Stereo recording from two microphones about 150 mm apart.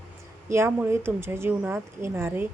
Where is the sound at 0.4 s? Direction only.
15° right (ahead or behind).